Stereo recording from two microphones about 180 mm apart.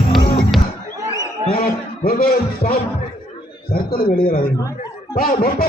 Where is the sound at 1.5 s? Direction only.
55° left (ahead or behind).